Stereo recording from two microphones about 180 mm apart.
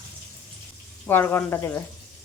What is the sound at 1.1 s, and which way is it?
Speech, 10° left (ahead or behind).